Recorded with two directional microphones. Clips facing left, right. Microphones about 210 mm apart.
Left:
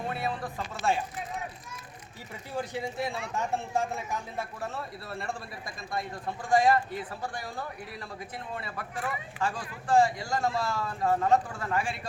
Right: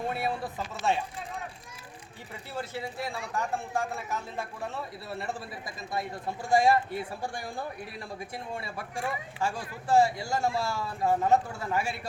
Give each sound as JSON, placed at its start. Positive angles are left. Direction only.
{"t": 0.2, "sound": "speech", "side_deg": -5}
{"t": 2.6, "sound": "a man's voice", "side_deg": 20}
{"t": 6.5, "sound": "speech", "side_deg": -10}